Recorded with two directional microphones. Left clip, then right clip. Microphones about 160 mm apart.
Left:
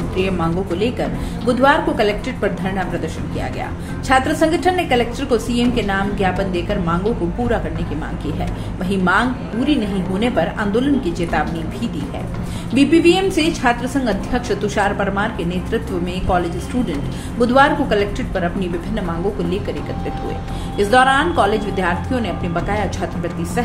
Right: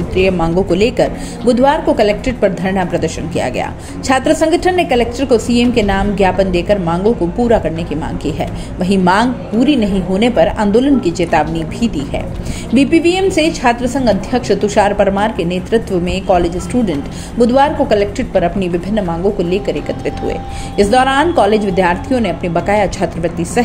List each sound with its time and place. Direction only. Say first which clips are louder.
0.2 s a woman's voice: right 7 dB; 40° right (ahead or behind)
8.8 s a woman's voice: right 5 dB; 35° right (ahead or behind)
20.7 s a woman's voice: right 2 dB; 35° right (ahead or behind)